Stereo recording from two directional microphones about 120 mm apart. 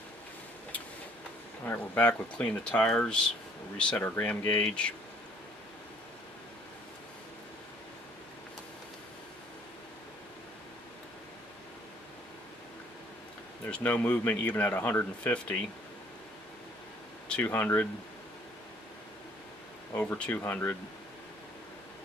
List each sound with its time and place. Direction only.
1.6 s speech: 15° left (ahead or behind)
13.7 s speech: 10° left (ahead or behind)
17.2 s speech: 10° left (ahead or behind)
19.9 s speech: 15° left (ahead or behind)